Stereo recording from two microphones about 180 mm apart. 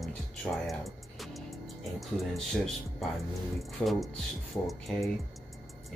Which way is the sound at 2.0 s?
Centre (ahead or behind).